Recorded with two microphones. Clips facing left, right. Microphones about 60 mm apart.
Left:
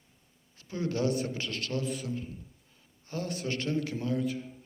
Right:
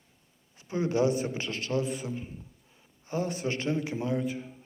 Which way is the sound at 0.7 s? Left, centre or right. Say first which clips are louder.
Right 4 dB; right.